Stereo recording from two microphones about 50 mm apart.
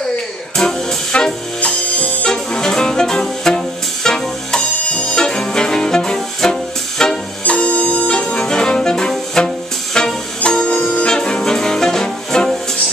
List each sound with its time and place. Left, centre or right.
0.6 s music: centre
2.0 s music: left
7.4 s music: left
8.1 s brass instrument: centre
9.9 s music: centre